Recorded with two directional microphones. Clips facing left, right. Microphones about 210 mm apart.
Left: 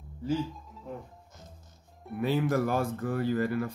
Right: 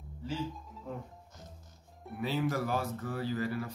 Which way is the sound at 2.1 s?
50° left (ahead or behind).